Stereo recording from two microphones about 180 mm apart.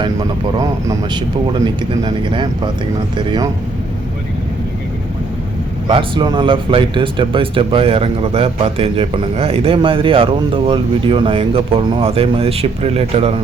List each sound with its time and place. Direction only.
0.6 s speech: 20° right (ahead or behind)
5.9 s speech: 25° right (ahead or behind)